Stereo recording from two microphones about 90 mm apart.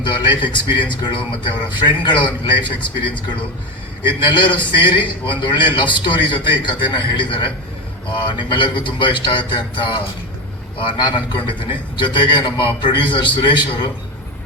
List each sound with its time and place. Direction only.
0.0 s a man's voice: 60° left (ahead or behind)